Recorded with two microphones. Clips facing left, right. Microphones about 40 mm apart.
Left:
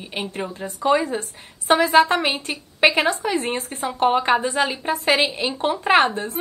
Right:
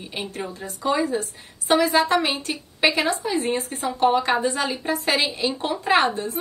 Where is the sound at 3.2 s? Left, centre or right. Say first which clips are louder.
Even; left.